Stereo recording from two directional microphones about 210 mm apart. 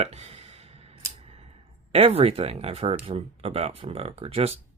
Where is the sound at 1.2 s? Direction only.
30° right (ahead or behind).